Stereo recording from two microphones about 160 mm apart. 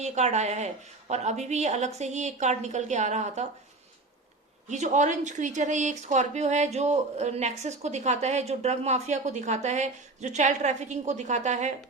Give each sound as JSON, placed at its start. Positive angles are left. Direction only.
{"t": 0.0, "sound": "speech", "side_deg": -45}
{"t": 4.7, "sound": "speech", "side_deg": -50}